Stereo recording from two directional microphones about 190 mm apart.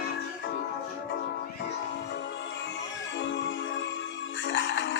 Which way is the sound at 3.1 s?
70° left (ahead or behind).